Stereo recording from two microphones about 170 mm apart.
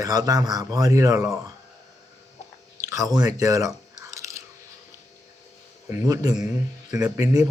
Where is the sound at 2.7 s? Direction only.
15° right (ahead or behind).